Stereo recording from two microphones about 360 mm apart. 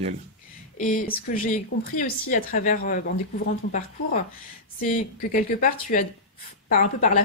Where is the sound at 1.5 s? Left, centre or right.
Left.